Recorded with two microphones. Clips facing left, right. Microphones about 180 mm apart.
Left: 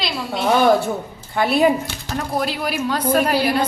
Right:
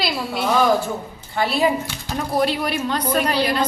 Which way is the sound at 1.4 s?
50° left (ahead or behind).